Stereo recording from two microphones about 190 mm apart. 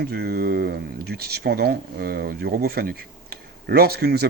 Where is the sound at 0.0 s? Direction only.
55° right (ahead or behind).